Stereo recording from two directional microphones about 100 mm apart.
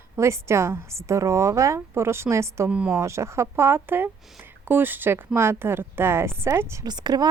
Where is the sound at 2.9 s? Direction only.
30° right (ahead or behind).